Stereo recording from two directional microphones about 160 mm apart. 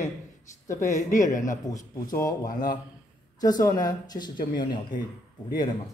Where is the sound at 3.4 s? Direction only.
25° left (ahead or behind).